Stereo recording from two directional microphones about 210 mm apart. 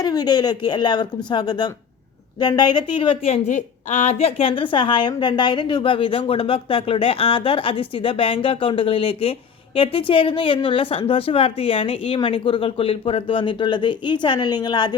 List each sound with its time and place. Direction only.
0.0 s a woman's voice: 20° left (ahead or behind)